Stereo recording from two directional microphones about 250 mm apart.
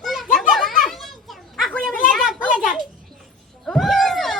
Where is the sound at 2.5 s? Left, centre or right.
Left.